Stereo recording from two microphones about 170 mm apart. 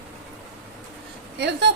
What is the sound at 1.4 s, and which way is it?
Speech, 80° right.